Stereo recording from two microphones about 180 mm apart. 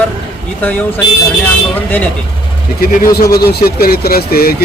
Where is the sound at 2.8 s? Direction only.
55° left (ahead or behind).